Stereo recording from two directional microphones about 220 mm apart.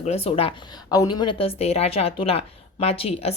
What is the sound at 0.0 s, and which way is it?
Speech, 30° left (ahead or behind).